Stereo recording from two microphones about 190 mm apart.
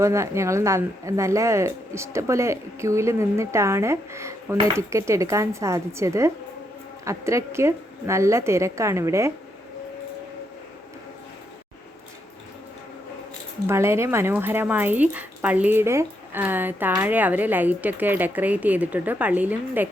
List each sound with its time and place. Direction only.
0.0 s speech: 15° right (ahead or behind)
13.7 s speech: 15° right (ahead or behind)